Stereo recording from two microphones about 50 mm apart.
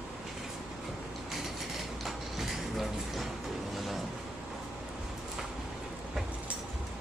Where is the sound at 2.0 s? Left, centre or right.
Centre.